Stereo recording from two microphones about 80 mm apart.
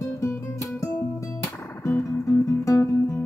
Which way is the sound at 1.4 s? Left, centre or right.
Left.